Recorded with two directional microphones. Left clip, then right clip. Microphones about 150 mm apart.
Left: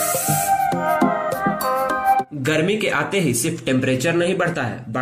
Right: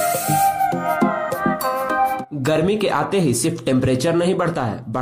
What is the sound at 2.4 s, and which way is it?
A man's voice, 35° right (ahead or behind).